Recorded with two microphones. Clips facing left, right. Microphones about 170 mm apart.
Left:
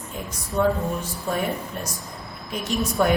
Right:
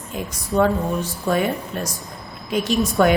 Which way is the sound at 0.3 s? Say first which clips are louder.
Right 3 dB; 90° right.